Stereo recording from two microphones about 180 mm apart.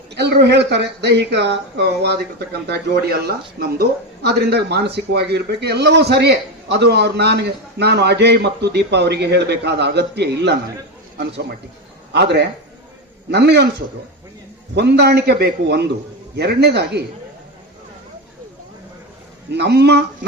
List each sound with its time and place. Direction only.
0.1 s speech: 70° right (ahead or behind)
12.1 s speech: 70° right (ahead or behind)
14.8 s speech: 65° right (ahead or behind)
19.5 s speech: 70° right (ahead or behind)